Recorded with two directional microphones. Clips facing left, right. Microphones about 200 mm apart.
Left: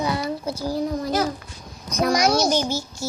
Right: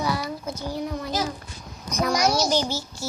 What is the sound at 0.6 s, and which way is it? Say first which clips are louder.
Speech: left 5 dB; 40° left (ahead or behind).